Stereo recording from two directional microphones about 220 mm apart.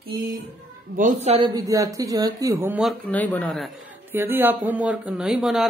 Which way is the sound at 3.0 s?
5° left (ahead or behind).